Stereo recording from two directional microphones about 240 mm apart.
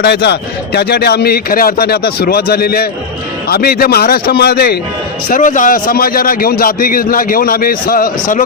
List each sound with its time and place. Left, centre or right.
0.0 s a man's voice: left